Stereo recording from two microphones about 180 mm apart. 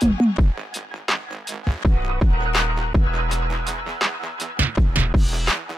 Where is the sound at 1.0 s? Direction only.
Centre (ahead or behind).